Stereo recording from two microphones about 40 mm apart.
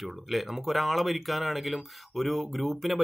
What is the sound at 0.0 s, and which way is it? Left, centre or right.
Speech, centre.